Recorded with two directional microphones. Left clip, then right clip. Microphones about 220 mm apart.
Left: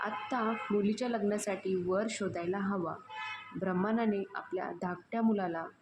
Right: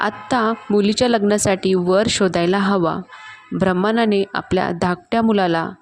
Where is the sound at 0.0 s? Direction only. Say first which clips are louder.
Right 15 dB; 40° right (ahead or behind).